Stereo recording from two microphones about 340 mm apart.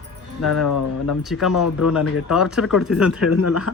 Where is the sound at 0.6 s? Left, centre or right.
Left.